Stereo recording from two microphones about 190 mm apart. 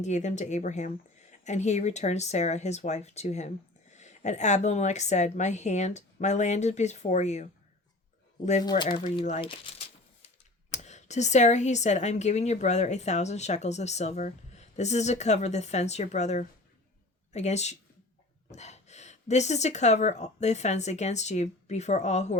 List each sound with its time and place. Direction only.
0.0 s speech: 40° left (ahead or behind)
8.6 s speech: 25° left (ahead or behind)